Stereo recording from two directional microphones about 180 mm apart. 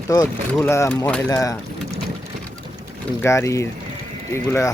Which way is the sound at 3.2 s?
15° left (ahead or behind).